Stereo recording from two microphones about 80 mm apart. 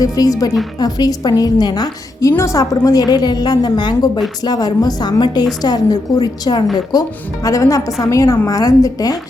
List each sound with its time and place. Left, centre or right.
0.0 s a woman's voice: left
2.3 s a woman's voice: left
7.4 s a woman's voice: left